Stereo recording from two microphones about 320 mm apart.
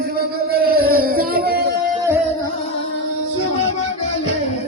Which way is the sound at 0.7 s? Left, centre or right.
Right.